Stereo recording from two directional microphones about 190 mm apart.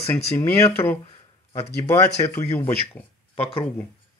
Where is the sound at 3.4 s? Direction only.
30° left (ahead or behind).